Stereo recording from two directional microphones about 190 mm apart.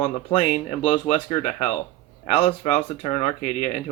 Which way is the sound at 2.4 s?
35° left (ahead or behind).